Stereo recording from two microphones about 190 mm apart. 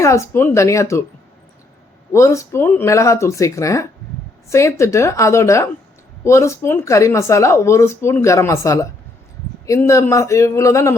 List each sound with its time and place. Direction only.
0.0 s speech: 15° left (ahead or behind)
2.1 s speech: 15° left (ahead or behind)